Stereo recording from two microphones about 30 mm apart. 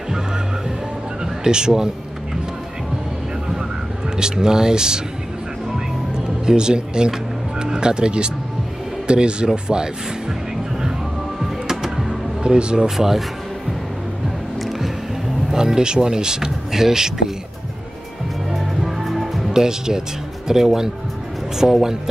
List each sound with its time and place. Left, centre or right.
1.2 s speech: right
4.2 s speech: right
6.1 s music: right
7.5 s speech: right
11.7 s music: centre
12.4 s speech: right
12.9 s speech: centre
15.5 s speech: right
19.0 s music: centre
19.5 s speech: centre